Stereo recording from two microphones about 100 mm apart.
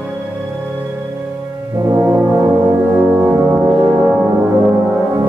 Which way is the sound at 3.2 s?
20° right (ahead or behind).